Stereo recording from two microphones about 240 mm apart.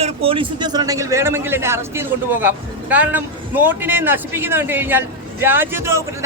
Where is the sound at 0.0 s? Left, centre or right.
Right.